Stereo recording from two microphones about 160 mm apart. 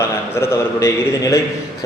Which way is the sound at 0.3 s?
15° left (ahead or behind).